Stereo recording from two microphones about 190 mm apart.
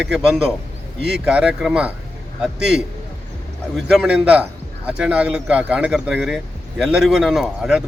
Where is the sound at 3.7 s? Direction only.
Centre (ahead or behind).